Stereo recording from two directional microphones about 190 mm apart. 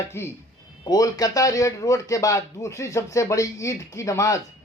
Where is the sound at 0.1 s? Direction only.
15° left (ahead or behind).